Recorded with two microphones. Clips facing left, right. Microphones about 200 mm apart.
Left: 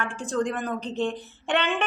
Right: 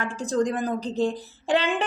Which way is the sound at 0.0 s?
40° right (ahead or behind).